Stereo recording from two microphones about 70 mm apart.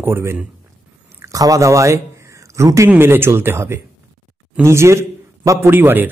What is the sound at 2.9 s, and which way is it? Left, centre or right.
A man's voice, right.